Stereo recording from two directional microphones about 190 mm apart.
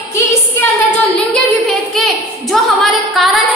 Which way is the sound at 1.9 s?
Centre (ahead or behind).